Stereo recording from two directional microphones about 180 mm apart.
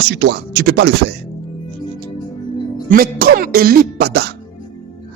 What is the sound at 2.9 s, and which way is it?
Speech, 55° right (ahead or behind).